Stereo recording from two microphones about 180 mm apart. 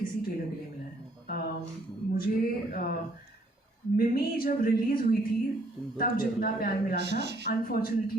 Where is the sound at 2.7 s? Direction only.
55° left (ahead or behind).